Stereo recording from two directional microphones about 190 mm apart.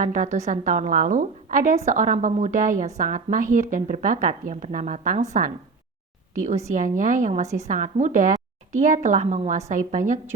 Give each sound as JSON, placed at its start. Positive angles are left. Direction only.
{"t": 0.0, "sound": "a woman's voice", "side_deg": -40}
{"t": 7.4, "sound": "a woman's voice", "side_deg": -15}
{"t": 7.7, "sound": "a woman's voice", "side_deg": -40}